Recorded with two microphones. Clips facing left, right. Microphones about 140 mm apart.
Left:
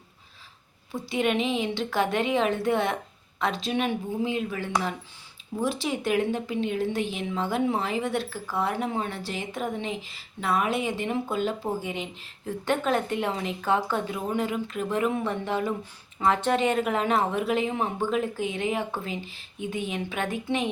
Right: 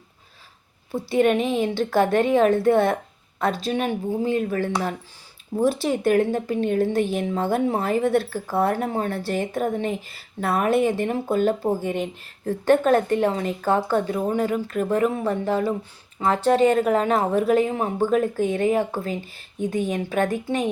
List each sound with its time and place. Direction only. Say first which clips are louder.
1.1 s a woman's voice: right 6 dB; 45° right (ahead or behind)